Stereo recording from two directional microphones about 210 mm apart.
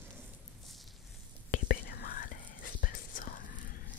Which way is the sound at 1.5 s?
45° left (ahead or behind).